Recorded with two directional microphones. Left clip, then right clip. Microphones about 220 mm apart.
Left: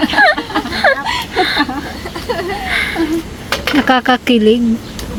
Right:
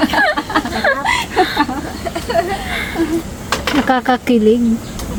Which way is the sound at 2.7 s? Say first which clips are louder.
Left 5 dB; 15° left (ahead or behind).